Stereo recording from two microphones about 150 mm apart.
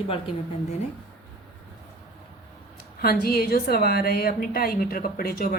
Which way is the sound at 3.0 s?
85° left.